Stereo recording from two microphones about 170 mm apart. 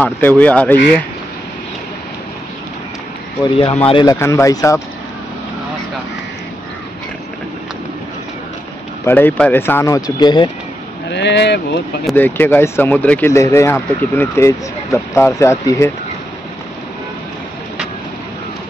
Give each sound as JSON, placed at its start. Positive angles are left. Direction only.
{"t": 0.0, "sound": "speech", "side_deg": 10}
{"t": 3.4, "sound": "speech", "side_deg": 30}
{"t": 4.0, "sound": "speech", "side_deg": 20}
{"t": 9.0, "sound": "speech", "side_deg": 10}
{"t": 11.1, "sound": "speech", "side_deg": 90}
{"t": 12.2, "sound": "speech", "side_deg": 10}